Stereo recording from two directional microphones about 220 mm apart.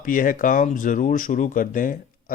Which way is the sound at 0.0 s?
40° left (ahead or behind).